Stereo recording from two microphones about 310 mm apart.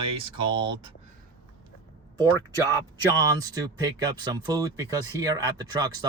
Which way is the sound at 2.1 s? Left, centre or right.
Centre.